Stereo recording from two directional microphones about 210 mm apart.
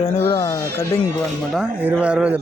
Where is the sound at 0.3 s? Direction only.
20° left (ahead or behind).